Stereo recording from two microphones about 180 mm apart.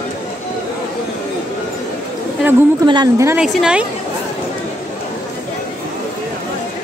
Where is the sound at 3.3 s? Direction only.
Centre (ahead or behind).